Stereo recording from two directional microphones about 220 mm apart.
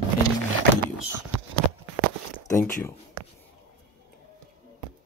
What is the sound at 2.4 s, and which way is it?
Speech, 10° left (ahead or behind).